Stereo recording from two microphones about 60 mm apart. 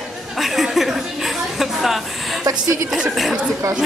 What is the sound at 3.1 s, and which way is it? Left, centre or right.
Speech, centre.